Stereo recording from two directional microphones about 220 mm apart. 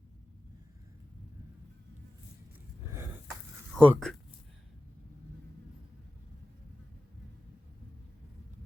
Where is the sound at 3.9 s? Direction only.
Centre (ahead or behind).